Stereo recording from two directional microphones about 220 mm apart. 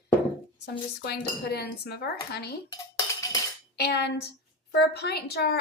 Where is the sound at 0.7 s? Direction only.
50° left (ahead or behind).